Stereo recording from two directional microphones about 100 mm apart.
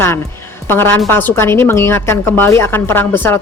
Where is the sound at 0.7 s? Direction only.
25° left (ahead or behind).